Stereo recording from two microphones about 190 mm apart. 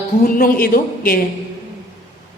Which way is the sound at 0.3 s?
50° left (ahead or behind).